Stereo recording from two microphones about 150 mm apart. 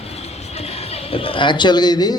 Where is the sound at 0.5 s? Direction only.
40° left (ahead or behind).